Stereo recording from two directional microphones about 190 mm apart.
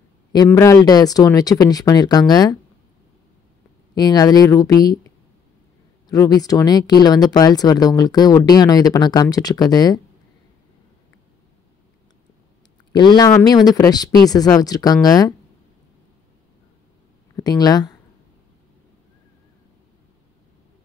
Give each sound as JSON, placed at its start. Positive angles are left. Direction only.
{"t": 0.5, "sound": "speech", "side_deg": 15}
{"t": 3.9, "sound": "speech", "side_deg": 20}
{"t": 12.9, "sound": "speech", "side_deg": 20}
{"t": 17.4, "sound": "speech", "side_deg": 20}